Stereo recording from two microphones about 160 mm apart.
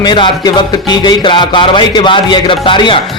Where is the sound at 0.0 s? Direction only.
30° left (ahead or behind).